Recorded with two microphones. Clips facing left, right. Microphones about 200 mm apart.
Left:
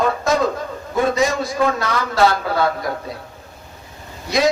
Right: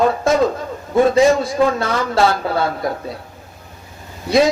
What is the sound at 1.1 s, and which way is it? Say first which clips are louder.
A man's voice: right 6 dB; 30° right (ahead or behind).